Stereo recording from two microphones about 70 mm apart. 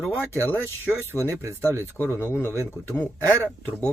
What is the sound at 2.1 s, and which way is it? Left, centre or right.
Speech, left.